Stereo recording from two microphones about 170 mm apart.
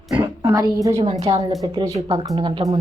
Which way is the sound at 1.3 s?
20° right (ahead or behind).